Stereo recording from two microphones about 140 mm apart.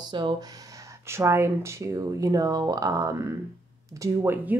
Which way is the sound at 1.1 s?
20° right (ahead or behind).